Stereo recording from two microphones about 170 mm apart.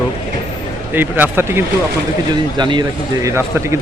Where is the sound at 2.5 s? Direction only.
25° right (ahead or behind).